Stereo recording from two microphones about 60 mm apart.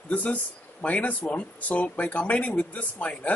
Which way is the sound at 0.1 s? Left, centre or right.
Left.